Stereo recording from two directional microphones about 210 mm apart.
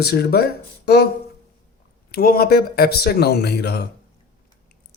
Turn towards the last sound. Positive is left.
turn(degrees=50)  # may be behind; listen again after turning